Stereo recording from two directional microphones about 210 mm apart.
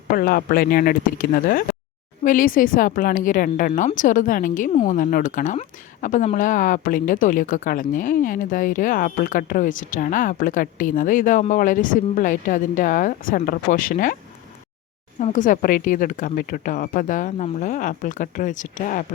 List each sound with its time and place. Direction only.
0.1 s speech: 45° left (ahead or behind)
15.2 s speech: 40° left (ahead or behind)